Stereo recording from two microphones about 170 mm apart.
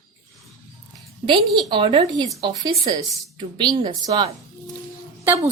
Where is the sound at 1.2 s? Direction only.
25° right (ahead or behind).